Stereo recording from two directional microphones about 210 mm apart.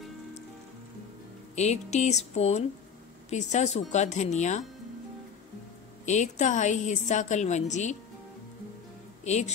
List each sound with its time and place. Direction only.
1.5 s a woman's voice: 35° left (ahead or behind)
6.0 s a woman's voice: 35° left (ahead or behind)
9.2 s speech: 35° left (ahead or behind)